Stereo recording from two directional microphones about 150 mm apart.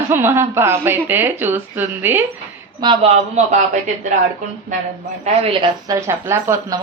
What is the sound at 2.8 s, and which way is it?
Speech, 45° right (ahead or behind).